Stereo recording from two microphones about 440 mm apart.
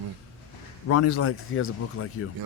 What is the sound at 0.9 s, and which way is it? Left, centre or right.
Speech, left.